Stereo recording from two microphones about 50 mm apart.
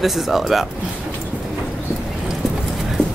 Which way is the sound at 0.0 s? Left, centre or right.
Centre.